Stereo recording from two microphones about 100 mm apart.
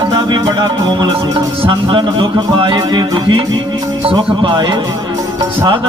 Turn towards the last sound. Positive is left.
turn(degrees=-50)  # may be behind; listen again after turning